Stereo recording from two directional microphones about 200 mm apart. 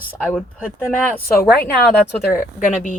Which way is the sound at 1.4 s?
10° left (ahead or behind).